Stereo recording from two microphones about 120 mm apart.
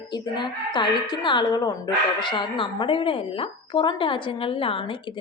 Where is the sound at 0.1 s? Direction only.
40° left (ahead or behind).